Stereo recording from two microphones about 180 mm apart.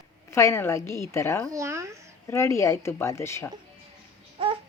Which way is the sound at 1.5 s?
15° right (ahead or behind).